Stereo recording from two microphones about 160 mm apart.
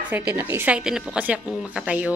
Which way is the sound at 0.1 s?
10° right (ahead or behind).